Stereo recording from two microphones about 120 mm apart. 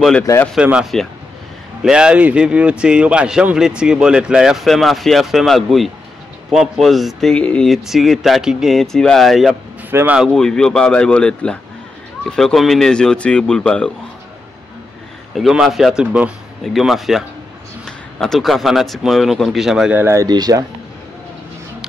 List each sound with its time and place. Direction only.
0.6 s speech: 10° right (ahead or behind)
9.8 s speech: 15° right (ahead or behind)
10.1 s speech: centre (ahead or behind)
15.3 s speech: centre (ahead or behind)
20.0 s speech: 20° right (ahead or behind)
20.2 s speech: 30° right (ahead or behind)